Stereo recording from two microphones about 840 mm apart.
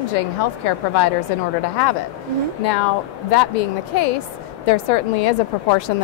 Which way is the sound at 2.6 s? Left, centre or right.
Left.